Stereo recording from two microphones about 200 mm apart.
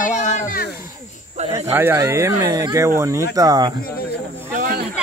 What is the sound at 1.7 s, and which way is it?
Speech, 10° right (ahead or behind).